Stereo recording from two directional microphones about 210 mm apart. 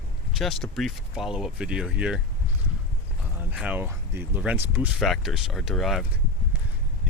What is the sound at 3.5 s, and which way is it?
Speech, 5° right (ahead or behind).